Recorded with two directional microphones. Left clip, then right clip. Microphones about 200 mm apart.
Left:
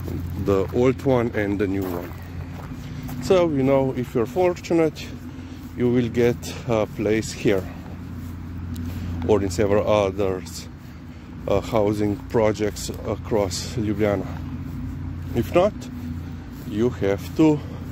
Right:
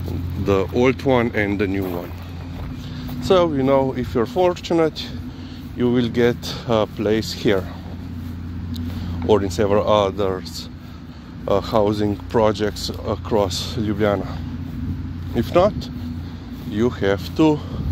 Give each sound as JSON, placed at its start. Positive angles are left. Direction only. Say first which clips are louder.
{"t": 0.5, "sound": "speech", "louder": "right 2 dB", "side_deg": 10}
{"t": 3.2, "sound": "speech", "louder": "right 2 dB", "side_deg": 15}
{"t": 9.3, "sound": "speech", "louder": "right 2 dB", "side_deg": 15}
{"t": 11.4, "sound": "speech", "louder": "right 3 dB", "side_deg": 15}
{"t": 15.3, "sound": "speech", "louder": "right 3 dB", "side_deg": 15}
{"t": 16.7, "sound": "speech", "louder": "right 2 dB", "side_deg": 15}